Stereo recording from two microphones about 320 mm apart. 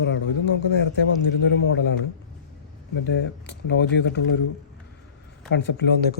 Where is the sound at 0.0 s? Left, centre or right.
Left.